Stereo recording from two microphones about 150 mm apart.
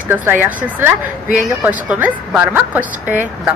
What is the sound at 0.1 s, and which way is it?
A woman's voice, 10° right (ahead or behind).